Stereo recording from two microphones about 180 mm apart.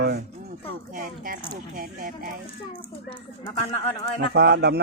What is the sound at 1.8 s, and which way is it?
Speech, 50° right (ahead or behind).